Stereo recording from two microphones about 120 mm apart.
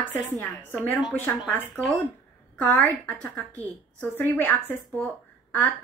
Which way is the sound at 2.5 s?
15° left (ahead or behind).